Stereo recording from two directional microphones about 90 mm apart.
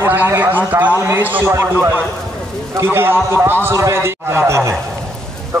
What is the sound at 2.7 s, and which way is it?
A man's voice, 25° right (ahead or behind).